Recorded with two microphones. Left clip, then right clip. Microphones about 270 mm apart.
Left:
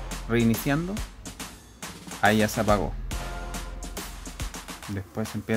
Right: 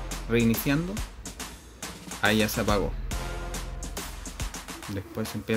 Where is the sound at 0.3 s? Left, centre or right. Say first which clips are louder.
Even; left.